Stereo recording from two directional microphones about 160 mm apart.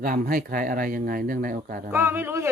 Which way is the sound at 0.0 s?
60° right (ahead or behind).